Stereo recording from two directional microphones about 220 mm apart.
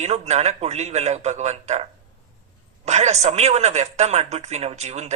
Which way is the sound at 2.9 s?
30° right (ahead or behind).